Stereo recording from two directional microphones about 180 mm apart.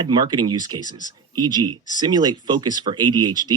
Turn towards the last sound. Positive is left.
turn(degrees=-25)  # may be behind; listen again after turning